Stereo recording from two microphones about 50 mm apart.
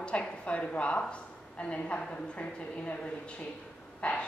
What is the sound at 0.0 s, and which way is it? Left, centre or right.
A woman's voice, left.